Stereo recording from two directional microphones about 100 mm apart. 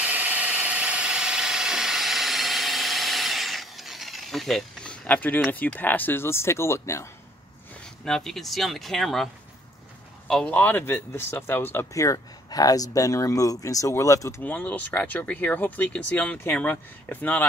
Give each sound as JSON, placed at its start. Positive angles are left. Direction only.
{"t": 0.0, "sound": "a sound", "side_deg": -15}
{"t": 5.5, "sound": "speech", "side_deg": 15}
{"t": 8.0, "sound": "speech", "side_deg": 5}
{"t": 11.9, "sound": "speech", "side_deg": 35}
{"t": 14.4, "sound": "speech", "side_deg": 15}